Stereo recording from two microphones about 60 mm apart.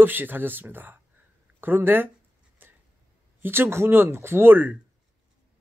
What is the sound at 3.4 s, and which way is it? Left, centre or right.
Speech, right.